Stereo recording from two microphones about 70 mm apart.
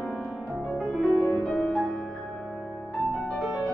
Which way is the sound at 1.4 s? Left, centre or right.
Centre.